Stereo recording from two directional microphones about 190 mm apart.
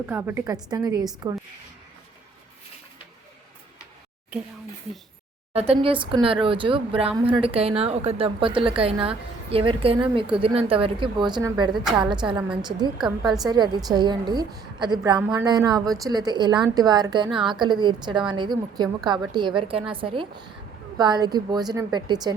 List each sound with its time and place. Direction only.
0.0 s a woman's voice: 10° right (ahead or behind)
5.5 s a woman's voice: 30° right (ahead or behind)
11.7 s a woman's voice: 5° right (ahead or behind)
11.9 s a woman's voice: 25° right (ahead or behind)
13.4 s a woman's voice: 20° right (ahead or behind)